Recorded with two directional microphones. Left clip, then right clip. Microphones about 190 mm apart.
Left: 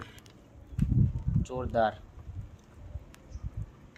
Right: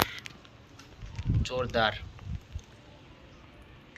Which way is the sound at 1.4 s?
40° left (ahead or behind).